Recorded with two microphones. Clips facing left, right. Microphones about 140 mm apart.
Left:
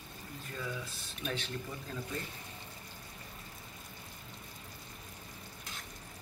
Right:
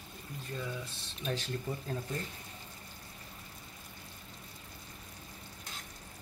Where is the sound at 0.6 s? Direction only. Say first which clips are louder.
Even; 30° right (ahead or behind).